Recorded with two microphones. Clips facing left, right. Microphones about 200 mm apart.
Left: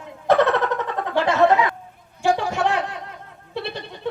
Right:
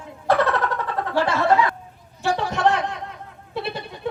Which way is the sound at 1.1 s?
15° left (ahead or behind).